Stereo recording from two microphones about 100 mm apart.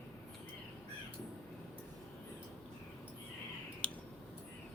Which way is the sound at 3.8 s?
10° left (ahead or behind).